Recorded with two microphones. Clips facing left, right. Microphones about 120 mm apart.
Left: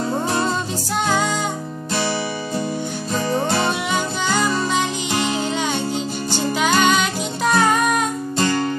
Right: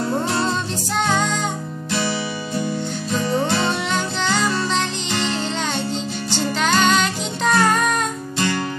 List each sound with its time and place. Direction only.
0.1 s music: 20° left (ahead or behind)
1.0 s music: 5° left (ahead or behind)
3.3 s music: 10° left (ahead or behind)
8.4 s music: 35° left (ahead or behind)